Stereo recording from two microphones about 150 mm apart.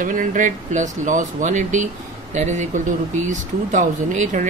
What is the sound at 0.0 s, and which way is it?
Speech, 60° right (ahead or behind).